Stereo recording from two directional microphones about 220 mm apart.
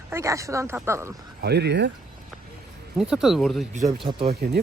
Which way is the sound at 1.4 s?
50° right (ahead or behind).